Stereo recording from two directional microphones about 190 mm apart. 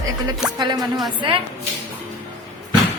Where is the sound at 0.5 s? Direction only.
25° right (ahead or behind).